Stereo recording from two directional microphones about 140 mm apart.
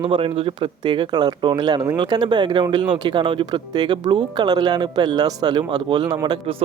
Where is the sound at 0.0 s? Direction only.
40° right (ahead or behind).